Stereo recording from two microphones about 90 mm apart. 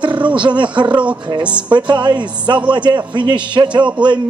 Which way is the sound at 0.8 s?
15° right (ahead or behind).